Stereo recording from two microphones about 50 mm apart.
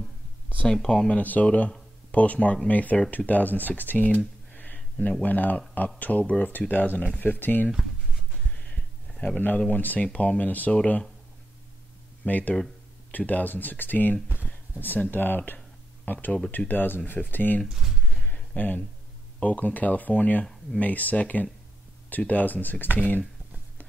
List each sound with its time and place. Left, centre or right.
0.7 s speech: centre
1.0 s speech: left
4.7 s a sound: left
5.2 s speech: left
8.5 s a sound: left
9.7 s speech: left
12.3 s speech: left
17.6 s speech: centre
18.6 s speech: left